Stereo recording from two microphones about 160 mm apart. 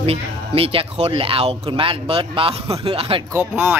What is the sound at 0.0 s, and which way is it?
Speech, 35° right (ahead or behind).